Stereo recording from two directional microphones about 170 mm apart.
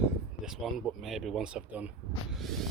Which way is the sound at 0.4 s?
Centre (ahead or behind).